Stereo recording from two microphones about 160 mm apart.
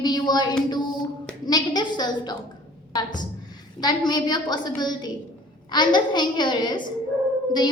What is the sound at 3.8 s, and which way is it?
A woman's voice, 25° left (ahead or behind).